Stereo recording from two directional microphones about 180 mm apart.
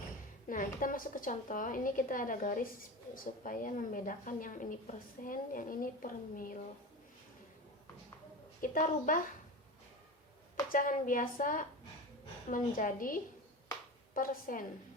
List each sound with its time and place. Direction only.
0.4 s a woman's voice: 50° left (ahead or behind)
8.6 s a woman's voice: 45° left (ahead or behind)
10.7 s a woman's voice: 50° left (ahead or behind)